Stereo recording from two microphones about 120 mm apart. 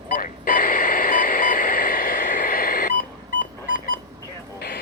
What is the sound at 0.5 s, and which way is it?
Radio, 90° left.